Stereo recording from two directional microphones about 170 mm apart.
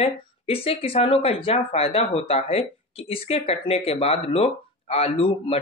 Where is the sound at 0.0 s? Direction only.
35° left (ahead or behind).